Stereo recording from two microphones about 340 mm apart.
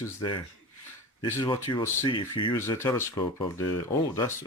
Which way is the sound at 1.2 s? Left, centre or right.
Centre.